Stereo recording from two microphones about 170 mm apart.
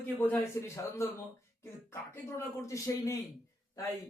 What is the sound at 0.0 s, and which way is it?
Speech, 10° left (ahead or behind).